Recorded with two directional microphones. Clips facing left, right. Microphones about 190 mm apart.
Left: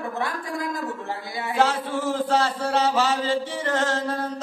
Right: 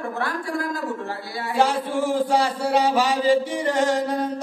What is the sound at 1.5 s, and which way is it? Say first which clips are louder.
A man's voice: right 2 dB; 15° right (ahead or behind).